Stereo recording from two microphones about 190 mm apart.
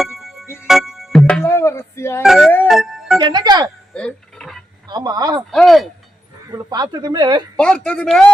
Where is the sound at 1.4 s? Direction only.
15° left (ahead or behind).